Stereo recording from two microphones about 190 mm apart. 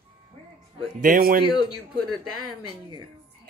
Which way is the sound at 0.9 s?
50° right (ahead or behind).